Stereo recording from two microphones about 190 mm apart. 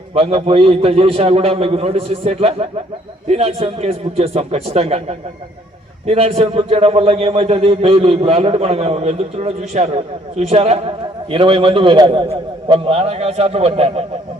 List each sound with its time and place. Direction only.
0.1 s a man's voice: 30° right (ahead or behind)